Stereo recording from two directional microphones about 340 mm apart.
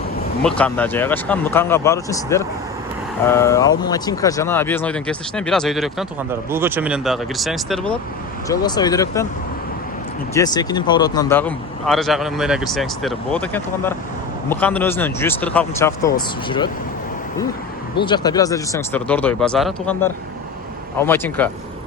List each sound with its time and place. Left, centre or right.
0.4 s speech: centre
8.4 s speech: centre
10.3 s speech: centre
18.0 s speech: centre